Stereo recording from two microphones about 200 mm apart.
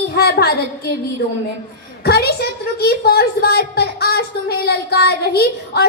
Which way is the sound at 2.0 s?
55° left (ahead or behind).